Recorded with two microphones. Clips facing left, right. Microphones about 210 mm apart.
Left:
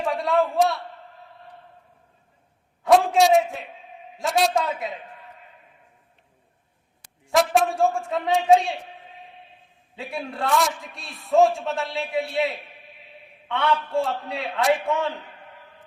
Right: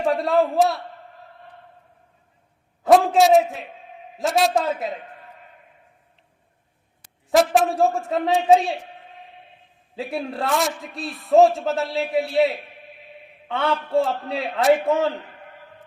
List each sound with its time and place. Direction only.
0.1 s a man's voice: centre (ahead or behind)
2.8 s a man's voice: centre (ahead or behind)
7.3 s a man's voice: centre (ahead or behind)
9.9 s a man's voice: centre (ahead or behind)
13.7 s a man's voice: 35° right (ahead or behind)
14.1 s a man's voice: centre (ahead or behind)